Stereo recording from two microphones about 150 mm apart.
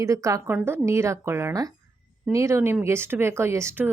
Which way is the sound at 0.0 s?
20° right (ahead or behind).